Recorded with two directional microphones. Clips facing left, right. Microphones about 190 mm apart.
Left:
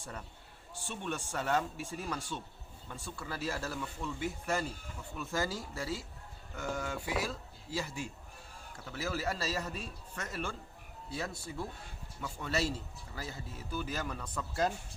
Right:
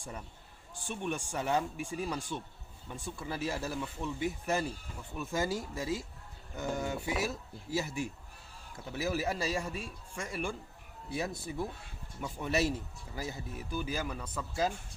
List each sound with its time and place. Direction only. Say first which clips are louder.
0.9 s speech: right 3 dB; 15° right (ahead or behind)